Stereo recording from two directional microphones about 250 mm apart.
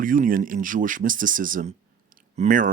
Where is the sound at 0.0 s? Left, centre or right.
Right.